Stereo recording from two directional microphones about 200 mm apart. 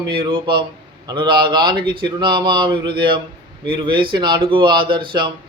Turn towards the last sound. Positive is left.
turn(degrees=-25)  # may be behind; listen again after turning